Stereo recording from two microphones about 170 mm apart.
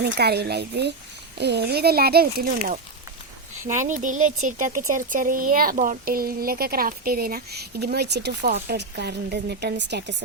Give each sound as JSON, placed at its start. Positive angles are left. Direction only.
{"t": 0.0, "sound": "speech", "side_deg": -70}
{"t": 3.7, "sound": "speech", "side_deg": -45}